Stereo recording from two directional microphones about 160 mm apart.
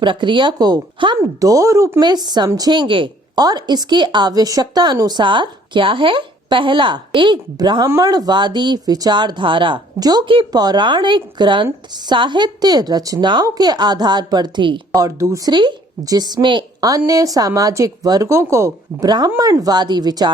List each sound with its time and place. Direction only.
0.0 s speech: 30° right (ahead or behind)